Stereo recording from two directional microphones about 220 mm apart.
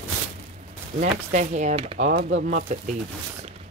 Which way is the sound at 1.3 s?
35° right (ahead or behind).